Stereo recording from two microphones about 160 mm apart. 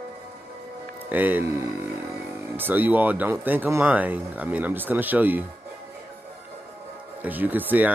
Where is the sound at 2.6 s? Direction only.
10° right (ahead or behind).